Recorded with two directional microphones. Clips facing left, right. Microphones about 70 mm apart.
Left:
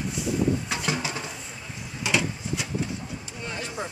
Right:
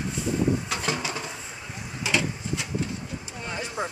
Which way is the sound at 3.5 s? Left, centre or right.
Centre.